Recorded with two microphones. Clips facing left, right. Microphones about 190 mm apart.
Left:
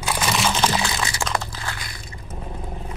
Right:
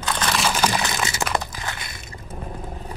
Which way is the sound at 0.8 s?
20° right (ahead or behind).